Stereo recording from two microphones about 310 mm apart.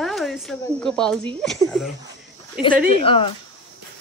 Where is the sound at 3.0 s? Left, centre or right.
Centre.